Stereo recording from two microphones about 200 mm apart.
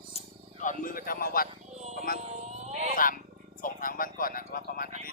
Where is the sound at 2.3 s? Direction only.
35° right (ahead or behind).